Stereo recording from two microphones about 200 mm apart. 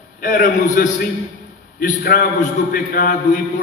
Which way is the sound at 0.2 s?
40° left (ahead or behind).